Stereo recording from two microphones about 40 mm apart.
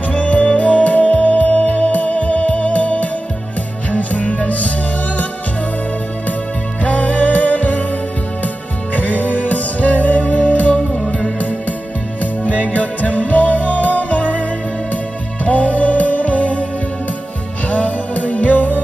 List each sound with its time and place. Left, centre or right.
0.1 s music: left
6.8 s music: left
8.9 s music: left
12.2 s music: left
15.4 s music: left
17.6 s music: left